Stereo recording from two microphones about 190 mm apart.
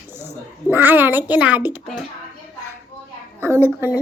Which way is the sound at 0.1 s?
10° right (ahead or behind).